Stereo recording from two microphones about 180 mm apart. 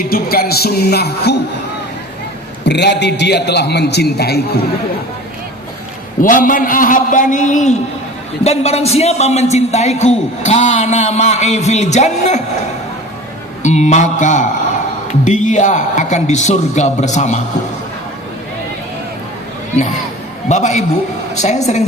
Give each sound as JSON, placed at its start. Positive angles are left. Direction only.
{"t": 0.1, "sound": "speech", "side_deg": 55}
{"t": 2.6, "sound": "a man's voice", "side_deg": 70}
{"t": 6.2, "sound": "a man's voice", "side_deg": 50}
{"t": 13.6, "sound": "a man's voice", "side_deg": 40}
{"t": 20.5, "sound": "a man's voice", "side_deg": 40}